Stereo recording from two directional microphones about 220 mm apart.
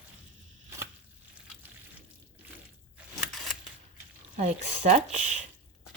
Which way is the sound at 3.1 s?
Centre (ahead or behind).